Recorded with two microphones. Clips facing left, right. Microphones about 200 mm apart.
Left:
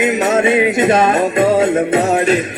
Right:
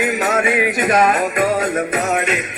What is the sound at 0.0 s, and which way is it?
Music, 25° left (ahead or behind).